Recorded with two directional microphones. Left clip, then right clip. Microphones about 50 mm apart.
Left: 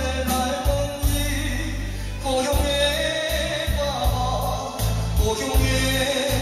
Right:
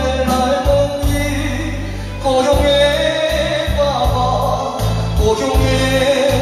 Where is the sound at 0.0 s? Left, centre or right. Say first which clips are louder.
Right 8 dB; left.